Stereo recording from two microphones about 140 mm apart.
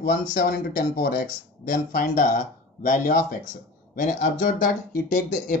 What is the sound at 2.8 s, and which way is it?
Speech, 65° left (ahead or behind).